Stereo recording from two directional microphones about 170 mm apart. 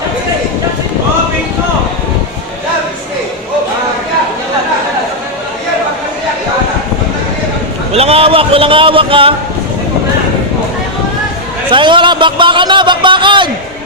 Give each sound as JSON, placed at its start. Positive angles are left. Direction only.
{"t": 7.9, "sound": "speech", "side_deg": -35}
{"t": 11.7, "sound": "a man's voice", "side_deg": -30}